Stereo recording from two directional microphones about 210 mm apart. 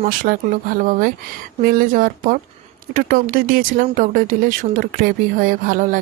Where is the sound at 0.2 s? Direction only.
40° right (ahead or behind).